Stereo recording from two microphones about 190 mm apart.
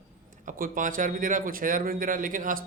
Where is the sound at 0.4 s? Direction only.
45° right (ahead or behind).